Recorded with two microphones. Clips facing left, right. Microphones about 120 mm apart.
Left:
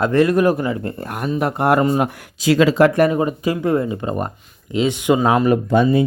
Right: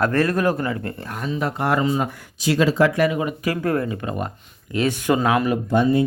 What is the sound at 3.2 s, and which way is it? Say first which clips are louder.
Speech: left 4 dB; 35° left (ahead or behind).